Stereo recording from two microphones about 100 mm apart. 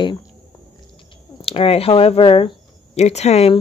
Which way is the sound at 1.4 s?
70° left (ahead or behind).